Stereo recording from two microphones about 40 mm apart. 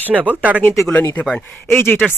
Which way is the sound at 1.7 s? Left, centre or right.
Left.